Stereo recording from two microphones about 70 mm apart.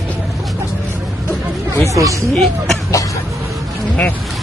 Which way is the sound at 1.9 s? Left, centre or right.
Right.